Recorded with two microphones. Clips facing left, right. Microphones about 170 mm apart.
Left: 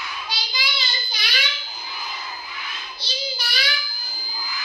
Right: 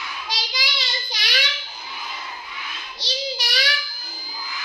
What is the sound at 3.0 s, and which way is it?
Child singing, 85° right.